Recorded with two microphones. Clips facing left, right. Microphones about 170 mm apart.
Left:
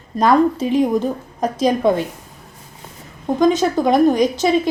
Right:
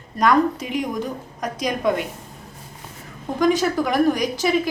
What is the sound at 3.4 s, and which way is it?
A woman's voice, 20° left (ahead or behind).